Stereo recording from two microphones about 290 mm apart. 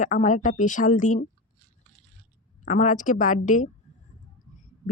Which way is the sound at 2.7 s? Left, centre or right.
Left.